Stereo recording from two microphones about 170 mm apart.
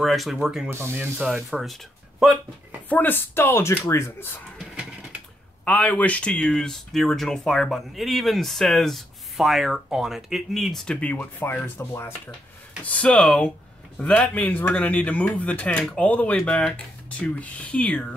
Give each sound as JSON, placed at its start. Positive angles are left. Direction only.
{"t": 0.0, "sound": "speech", "side_deg": 0}
{"t": 0.7, "sound": "speech", "side_deg": -15}
{"t": 1.3, "sound": "speech", "side_deg": 0}
{"t": 2.9, "sound": "speech", "side_deg": 10}
{"t": 5.7, "sound": "speech", "side_deg": 10}